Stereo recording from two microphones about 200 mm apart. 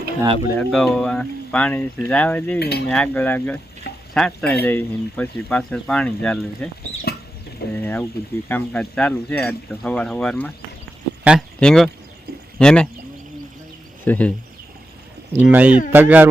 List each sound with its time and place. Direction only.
0.2 s speech: 15° right (ahead or behind)
0.6 s speech: centre (ahead or behind)
2.6 s cutlery: 55° left (ahead or behind)
2.9 s speech: 5° left (ahead or behind)
7.8 s a sound: 10° left (ahead or behind)
8.4 s speech: 5° left (ahead or behind)
14.0 s speech: 10° left (ahead or behind)
15.4 s speech: 5° right (ahead or behind)